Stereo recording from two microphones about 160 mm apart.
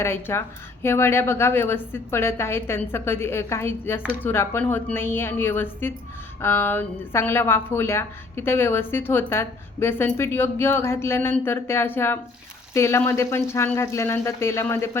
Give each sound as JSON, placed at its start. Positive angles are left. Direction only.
{"t": 0.0, "sound": "a woman's voice", "side_deg": 15}